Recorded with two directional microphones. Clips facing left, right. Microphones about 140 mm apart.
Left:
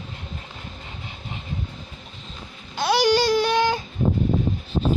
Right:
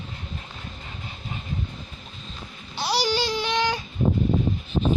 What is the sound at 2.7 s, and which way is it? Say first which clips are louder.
Baby cry: left 6 dB; 50° left (ahead or behind).